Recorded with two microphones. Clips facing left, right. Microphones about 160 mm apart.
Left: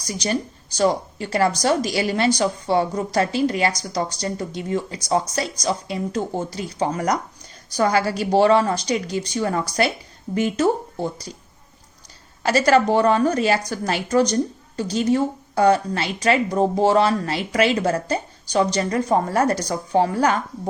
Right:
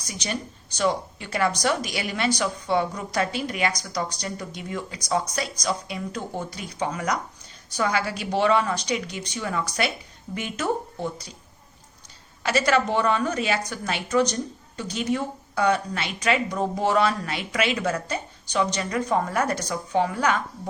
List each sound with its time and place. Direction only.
0.0 s a woman's voice: 35° left (ahead or behind)
12.4 s a woman's voice: 35° left (ahead or behind)